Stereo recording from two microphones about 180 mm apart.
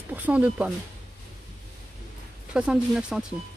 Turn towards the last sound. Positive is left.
turn(degrees=-5)  # may be behind; listen again after turning